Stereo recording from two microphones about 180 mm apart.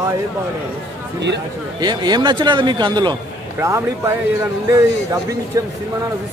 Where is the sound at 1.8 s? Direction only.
25° right (ahead or behind).